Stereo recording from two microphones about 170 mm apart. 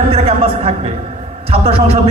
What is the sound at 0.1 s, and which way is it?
A man's voice, 35° right (ahead or behind).